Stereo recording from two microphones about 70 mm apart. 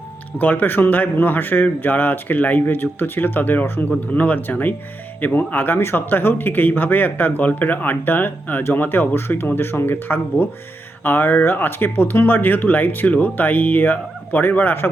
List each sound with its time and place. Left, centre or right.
0.3 s speech: left